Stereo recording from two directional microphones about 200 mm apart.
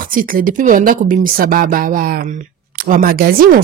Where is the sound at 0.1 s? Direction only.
45° right (ahead or behind).